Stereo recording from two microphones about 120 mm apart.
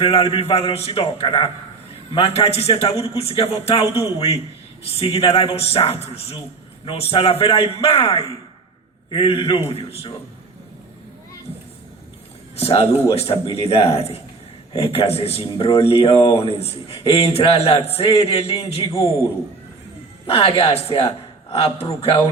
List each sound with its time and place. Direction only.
0.0 s a man's voice: 55° left (ahead or behind)
12.5 s a man's voice: 55° left (ahead or behind)
20.2 s speech: 50° left (ahead or behind)